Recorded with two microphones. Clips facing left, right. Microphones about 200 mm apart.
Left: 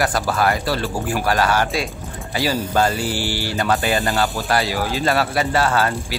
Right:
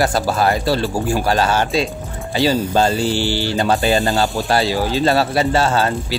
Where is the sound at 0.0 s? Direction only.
25° right (ahead or behind).